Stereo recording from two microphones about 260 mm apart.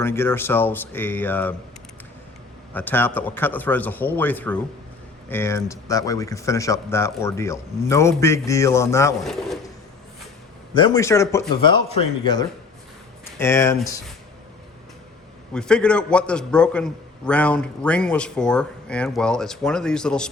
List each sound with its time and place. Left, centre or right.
0.0 s speech: centre
2.7 s speech: centre
10.8 s speech: centre
15.5 s a man's voice: centre